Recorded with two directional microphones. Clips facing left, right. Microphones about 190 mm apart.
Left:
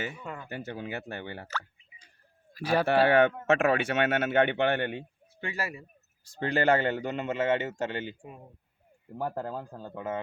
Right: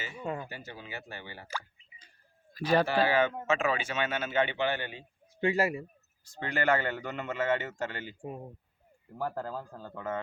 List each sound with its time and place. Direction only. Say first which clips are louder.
0.4 s speech: left 7 dB; 55° left (ahead or behind)
2.5 s speech: right 1 dB; 10° left (ahead or behind)
2.8 s speech: left 5 dB; 60° left (ahead or behind)
5.4 s speech: right 8 dB; 20° right (ahead or behind)
6.4 s a man's voice: left 4 dB; 30° left (ahead or behind)
9.1 s a man's voice: left 2 dB; 20° left (ahead or behind)